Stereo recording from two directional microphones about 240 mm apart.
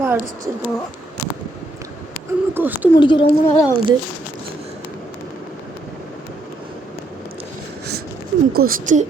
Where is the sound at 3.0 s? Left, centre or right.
Centre.